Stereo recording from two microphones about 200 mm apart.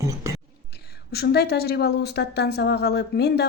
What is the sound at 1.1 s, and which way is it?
Speech, 55° left (ahead or behind).